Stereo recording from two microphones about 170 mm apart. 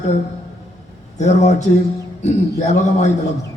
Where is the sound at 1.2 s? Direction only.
45° left (ahead or behind).